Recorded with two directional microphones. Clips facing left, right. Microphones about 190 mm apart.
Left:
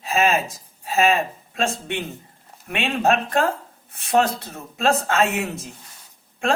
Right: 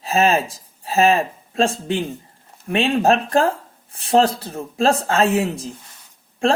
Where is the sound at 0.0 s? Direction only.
35° right (ahead or behind).